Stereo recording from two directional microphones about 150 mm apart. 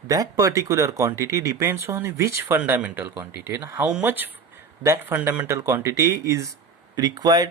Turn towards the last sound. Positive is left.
turn(degrees=-25)  # may be behind; listen again after turning